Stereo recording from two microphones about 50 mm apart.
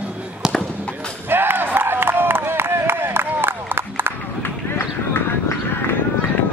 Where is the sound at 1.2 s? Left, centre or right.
Right.